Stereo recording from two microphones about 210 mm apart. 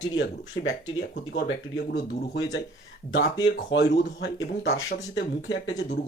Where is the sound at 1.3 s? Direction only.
60° left (ahead or behind).